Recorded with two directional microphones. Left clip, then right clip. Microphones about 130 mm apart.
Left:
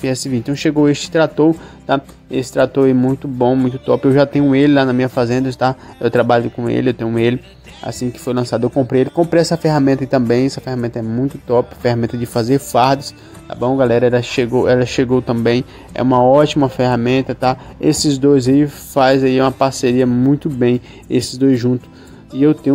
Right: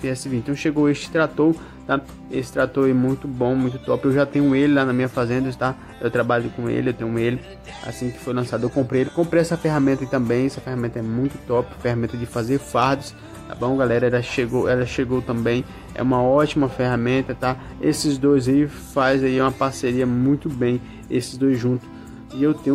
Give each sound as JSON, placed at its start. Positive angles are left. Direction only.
{"t": 0.0, "sound": "speech", "side_deg": 30}